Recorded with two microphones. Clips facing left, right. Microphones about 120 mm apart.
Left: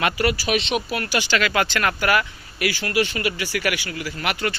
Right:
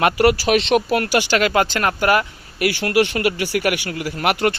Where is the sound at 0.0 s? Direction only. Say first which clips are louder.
Right 6 dB; 60° right (ahead or behind).